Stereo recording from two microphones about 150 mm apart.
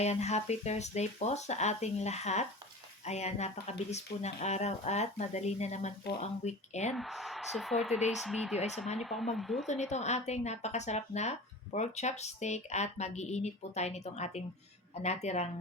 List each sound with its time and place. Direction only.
0.0 s speech: 50° left (ahead or behind)
6.9 s speech: centre (ahead or behind)
9.9 s speech: 50° left (ahead or behind)